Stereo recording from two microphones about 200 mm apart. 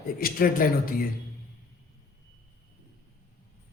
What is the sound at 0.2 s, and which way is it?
Speech, 45° left (ahead or behind).